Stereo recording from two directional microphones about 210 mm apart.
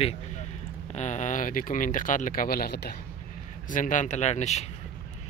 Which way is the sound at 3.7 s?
40° left (ahead or behind).